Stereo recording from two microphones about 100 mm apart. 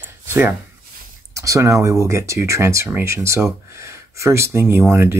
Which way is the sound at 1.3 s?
35° right (ahead or behind).